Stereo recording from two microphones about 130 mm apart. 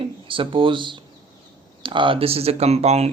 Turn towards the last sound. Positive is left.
turn(degrees=-55)  # may be behind; listen again after turning